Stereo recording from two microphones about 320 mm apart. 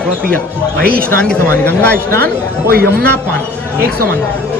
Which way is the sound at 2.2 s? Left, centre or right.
Right.